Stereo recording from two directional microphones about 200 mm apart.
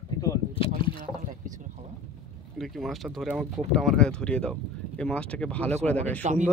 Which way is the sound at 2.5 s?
Centre (ahead or behind).